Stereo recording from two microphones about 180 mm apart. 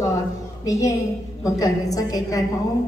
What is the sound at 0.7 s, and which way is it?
A woman's voice, 20° left (ahead or behind).